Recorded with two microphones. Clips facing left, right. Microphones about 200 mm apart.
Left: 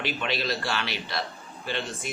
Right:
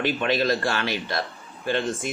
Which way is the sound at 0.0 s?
50° right (ahead or behind).